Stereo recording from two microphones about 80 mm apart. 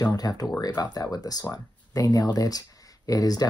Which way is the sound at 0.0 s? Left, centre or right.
Left.